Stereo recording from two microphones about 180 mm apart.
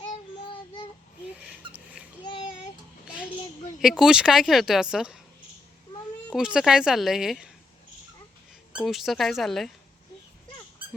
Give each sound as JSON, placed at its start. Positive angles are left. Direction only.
{"t": 1.4, "sound": "a sound", "side_deg": -5}
{"t": 2.2, "sound": "child singing", "side_deg": 30}
{"t": 3.8, "sound": "speech", "side_deg": 0}
{"t": 6.3, "sound": "speech", "side_deg": -5}
{"t": 8.7, "sound": "speech", "side_deg": 0}